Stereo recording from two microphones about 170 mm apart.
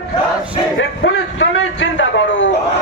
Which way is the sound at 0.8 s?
90° left.